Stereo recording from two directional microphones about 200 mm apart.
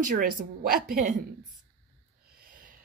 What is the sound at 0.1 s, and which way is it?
Speech, 40° right (ahead or behind).